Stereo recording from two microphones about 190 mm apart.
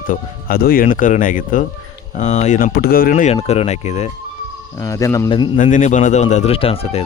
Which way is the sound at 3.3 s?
30° left (ahead or behind).